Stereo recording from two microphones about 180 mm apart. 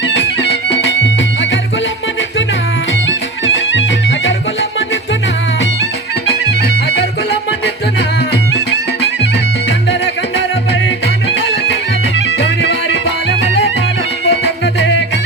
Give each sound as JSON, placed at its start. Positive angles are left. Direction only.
{"t": 0.1, "sound": "music", "side_deg": 75}
{"t": 3.1, "sound": "music", "side_deg": 90}
{"t": 12.4, "sound": "music", "side_deg": 85}